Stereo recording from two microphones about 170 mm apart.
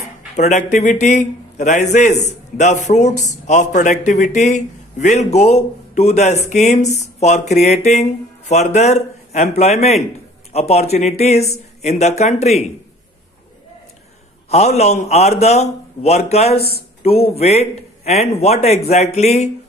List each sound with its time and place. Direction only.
0.4 s a man's voice: 45° left (ahead or behind)
14.8 s speech: 40° left (ahead or behind)